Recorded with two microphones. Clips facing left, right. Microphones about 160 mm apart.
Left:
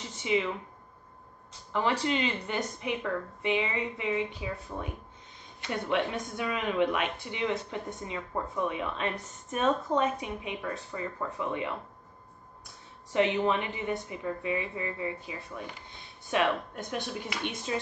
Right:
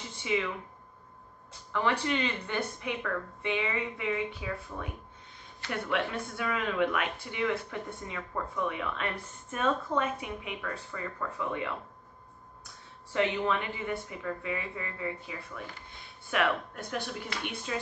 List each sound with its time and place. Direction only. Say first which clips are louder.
0.2 s speech: left 2 dB; 20° left (ahead or behind)
1.7 s speech: left 1 dB; 25° left (ahead or behind)
13.1 s speech: left 3 dB; 20° left (ahead or behind)